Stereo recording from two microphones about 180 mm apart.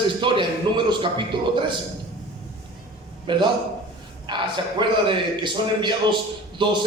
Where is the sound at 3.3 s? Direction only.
25° right (ahead or behind).